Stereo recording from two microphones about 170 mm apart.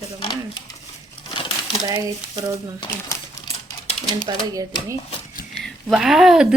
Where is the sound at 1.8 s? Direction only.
20° right (ahead or behind).